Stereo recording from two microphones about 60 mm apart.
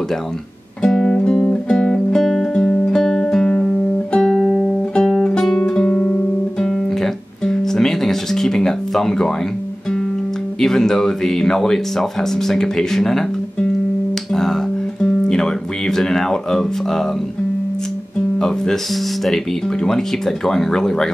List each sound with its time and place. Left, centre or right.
0.8 s music: centre
5.6 s guitar: centre
10.6 s speech: centre
14.3 s guitar: centre
18.4 s speech: centre
19.8 s speech: centre